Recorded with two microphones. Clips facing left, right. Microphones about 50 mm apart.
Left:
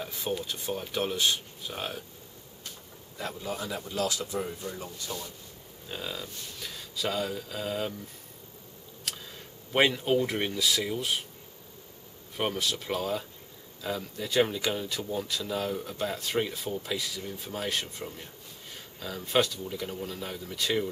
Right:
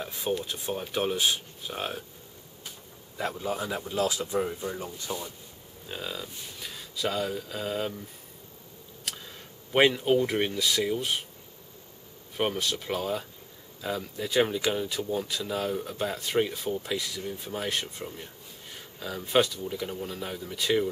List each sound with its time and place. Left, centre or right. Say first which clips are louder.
0.0 s speech: right 2 dB; centre
3.3 s speech: right 3 dB; centre
5.9 s speech: right 1 dB; centre
9.0 s speech: even; centre
12.4 s speech: right 2 dB; centre